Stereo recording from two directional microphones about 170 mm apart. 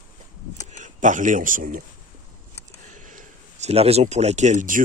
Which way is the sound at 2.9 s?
50° right (ahead or behind).